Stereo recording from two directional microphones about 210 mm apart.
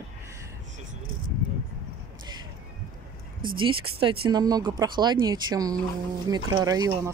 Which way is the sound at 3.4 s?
25° right (ahead or behind).